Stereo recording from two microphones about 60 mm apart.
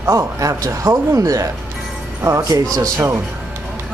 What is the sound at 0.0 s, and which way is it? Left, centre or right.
Speech, right.